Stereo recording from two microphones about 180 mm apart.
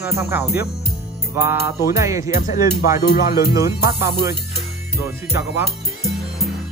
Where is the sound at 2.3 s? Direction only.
50° left (ahead or behind).